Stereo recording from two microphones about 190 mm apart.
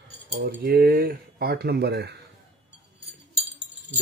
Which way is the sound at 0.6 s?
55° right (ahead or behind).